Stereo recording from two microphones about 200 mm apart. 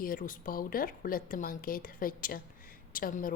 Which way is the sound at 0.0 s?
45° left (ahead or behind).